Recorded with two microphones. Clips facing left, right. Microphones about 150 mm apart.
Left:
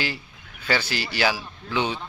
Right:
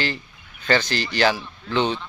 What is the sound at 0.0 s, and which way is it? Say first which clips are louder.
Speech: right 3 dB; 10° left (ahead or behind).